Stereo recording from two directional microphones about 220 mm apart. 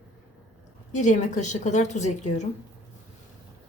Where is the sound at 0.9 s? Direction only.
35° left (ahead or behind).